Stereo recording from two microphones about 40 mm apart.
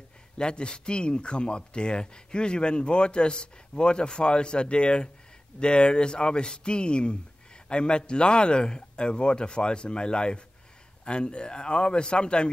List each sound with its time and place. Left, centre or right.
0.4 s speech: left